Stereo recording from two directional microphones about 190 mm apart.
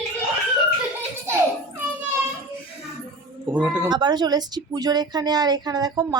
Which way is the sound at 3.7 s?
25° right (ahead or behind).